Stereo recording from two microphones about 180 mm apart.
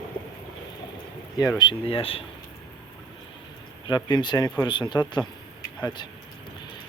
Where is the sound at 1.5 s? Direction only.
30° left (ahead or behind).